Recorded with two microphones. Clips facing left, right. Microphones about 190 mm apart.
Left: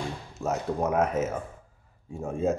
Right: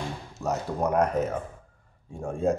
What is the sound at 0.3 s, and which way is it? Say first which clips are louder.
Speech: left 1 dB; centre (ahead or behind).